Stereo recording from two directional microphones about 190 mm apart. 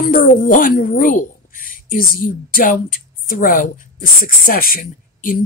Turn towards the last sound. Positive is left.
turn(degrees=50)  # may be behind; listen again after turning